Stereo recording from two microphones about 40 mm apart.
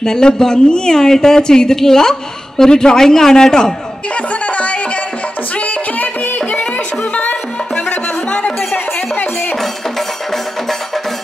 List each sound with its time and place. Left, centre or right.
0.0 s a woman's voice: centre
4.1 s music: left
8.7 s music: left